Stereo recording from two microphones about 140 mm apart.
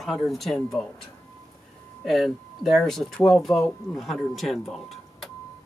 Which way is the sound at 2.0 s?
Centre (ahead or behind).